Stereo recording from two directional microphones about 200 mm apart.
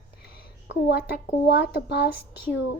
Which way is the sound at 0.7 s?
55° left (ahead or behind).